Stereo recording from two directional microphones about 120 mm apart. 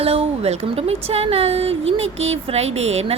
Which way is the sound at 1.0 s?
55° right (ahead or behind).